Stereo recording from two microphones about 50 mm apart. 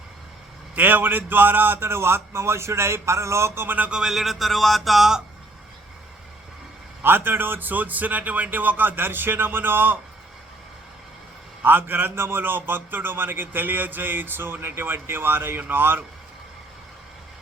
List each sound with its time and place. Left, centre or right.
0.8 s speech: right
3.8 s speech: right
4.0 s a sound: centre
7.0 s a man's voice: right
11.6 s a man's voice: right